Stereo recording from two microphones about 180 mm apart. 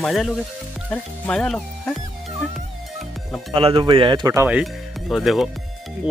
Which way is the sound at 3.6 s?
30° right (ahead or behind).